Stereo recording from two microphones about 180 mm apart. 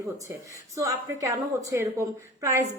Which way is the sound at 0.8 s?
15° right (ahead or behind).